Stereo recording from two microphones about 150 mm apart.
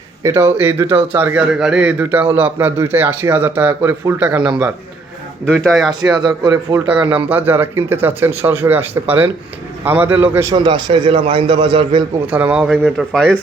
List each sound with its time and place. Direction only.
0.2 s a man's voice: 20° right (ahead or behind)
5.6 s speech: centre (ahead or behind)
6.1 s speech: 30° right (ahead or behind)
7.3 s a man's voice: 10° right (ahead or behind)
10.5 s a man's voice: 30° right (ahead or behind)
12.3 s speech: 10° right (ahead or behind)